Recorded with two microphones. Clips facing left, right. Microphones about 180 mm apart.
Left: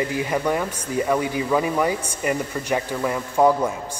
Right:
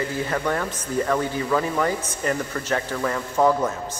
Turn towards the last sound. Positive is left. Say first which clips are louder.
# left 2 dB
turn(degrees=10)  # may be behind; listen again after turning